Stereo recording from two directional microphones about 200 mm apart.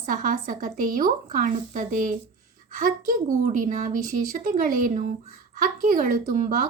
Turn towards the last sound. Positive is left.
turn(degrees=-40)  # may be behind; listen again after turning